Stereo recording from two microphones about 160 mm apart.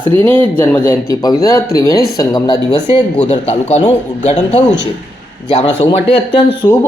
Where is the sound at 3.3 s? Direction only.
45° left (ahead or behind).